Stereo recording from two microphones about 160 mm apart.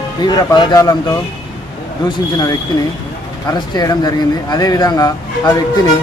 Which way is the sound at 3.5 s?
25° left (ahead or behind).